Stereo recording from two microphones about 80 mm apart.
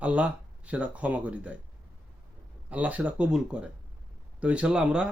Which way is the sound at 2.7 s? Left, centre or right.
Centre.